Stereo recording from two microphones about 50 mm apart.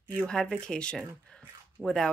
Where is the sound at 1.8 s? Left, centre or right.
Right.